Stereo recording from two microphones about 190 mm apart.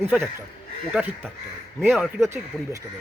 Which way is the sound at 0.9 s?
5° right (ahead or behind).